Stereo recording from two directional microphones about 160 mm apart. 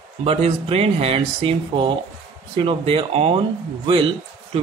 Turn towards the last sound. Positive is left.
turn(degrees=-35)  # may be behind; listen again after turning